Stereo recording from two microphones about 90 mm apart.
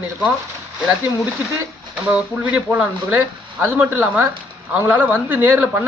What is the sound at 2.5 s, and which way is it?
Speech, 15° right (ahead or behind).